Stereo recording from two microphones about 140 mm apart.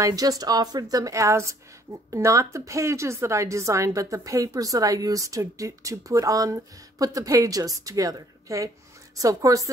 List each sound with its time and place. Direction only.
0.0 s speech: 25° right (ahead or behind)